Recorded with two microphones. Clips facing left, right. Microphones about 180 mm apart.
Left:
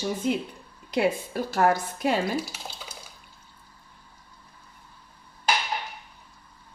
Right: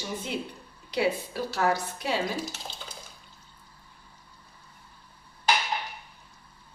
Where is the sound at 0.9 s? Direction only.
50° left (ahead or behind).